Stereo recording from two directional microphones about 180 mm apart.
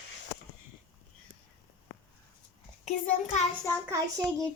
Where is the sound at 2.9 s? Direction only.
40° left (ahead or behind).